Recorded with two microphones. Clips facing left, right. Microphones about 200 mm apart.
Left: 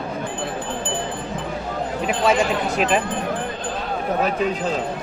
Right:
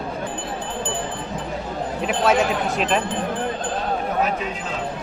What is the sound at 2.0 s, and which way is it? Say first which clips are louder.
Speech: even; centre (ahead or behind).